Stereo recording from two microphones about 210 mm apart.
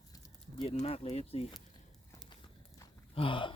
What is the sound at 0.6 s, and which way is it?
Speech, 30° left (ahead or behind).